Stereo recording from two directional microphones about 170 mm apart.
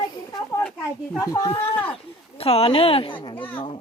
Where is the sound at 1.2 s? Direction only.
20° left (ahead or behind).